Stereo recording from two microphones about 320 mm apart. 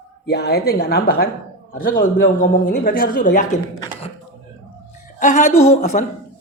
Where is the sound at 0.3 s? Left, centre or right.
Left.